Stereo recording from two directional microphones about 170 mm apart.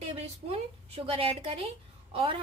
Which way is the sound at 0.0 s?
35° right (ahead or behind).